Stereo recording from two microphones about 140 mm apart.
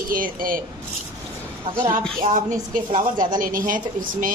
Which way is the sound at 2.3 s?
60° right (ahead or behind).